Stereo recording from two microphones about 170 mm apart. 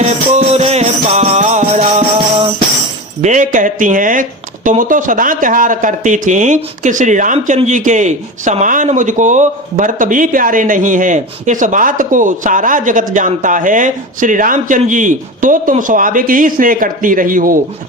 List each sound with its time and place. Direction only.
0.0 s music: 40° right (ahead or behind)
3.2 s speech: 45° right (ahead or behind)